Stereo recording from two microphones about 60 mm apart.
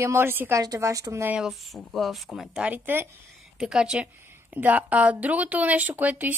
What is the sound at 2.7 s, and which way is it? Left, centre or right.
Speech, right.